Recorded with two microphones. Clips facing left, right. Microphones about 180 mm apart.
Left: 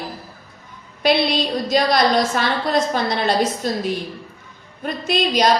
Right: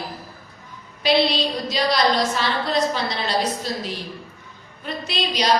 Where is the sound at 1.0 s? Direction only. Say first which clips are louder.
Left 1 dB; 50° left (ahead or behind).